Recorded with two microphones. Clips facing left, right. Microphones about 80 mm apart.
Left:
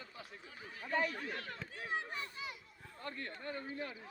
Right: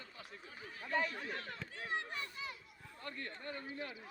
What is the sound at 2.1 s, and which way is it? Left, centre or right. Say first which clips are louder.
Children playing: left 1 dB; centre.